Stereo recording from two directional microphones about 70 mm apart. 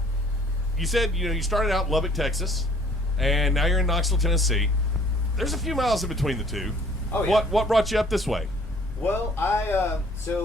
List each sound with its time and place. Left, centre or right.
0.8 s speech: centre
9.0 s a man's voice: left